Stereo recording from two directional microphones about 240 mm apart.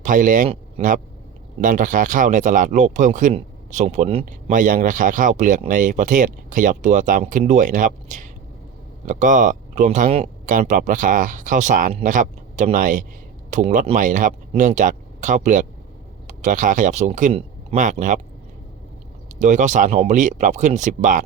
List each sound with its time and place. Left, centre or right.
0.0 s speech: right
19.4 s speech: right